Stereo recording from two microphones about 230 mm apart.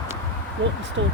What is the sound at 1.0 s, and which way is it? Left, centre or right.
Speech, right.